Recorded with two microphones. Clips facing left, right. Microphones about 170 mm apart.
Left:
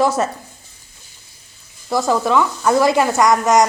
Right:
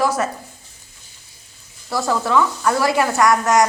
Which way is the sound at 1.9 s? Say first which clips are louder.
Left 2 dB; 15° left (ahead or behind).